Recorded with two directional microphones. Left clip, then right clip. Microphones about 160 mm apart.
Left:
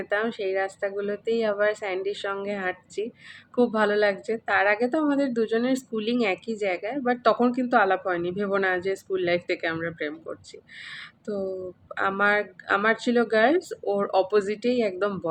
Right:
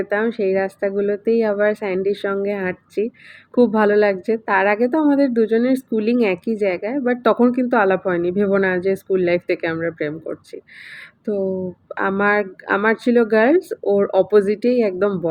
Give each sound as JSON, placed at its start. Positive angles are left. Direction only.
{"t": 0.0, "sound": "a woman's voice", "side_deg": -20}
{"t": 11.9, "sound": "a woman's voice", "side_deg": -20}